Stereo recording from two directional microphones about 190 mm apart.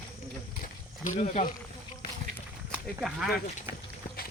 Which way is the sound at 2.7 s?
Centre (ahead or behind).